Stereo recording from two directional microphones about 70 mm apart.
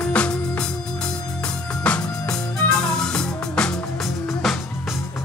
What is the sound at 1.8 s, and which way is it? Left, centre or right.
Music, centre.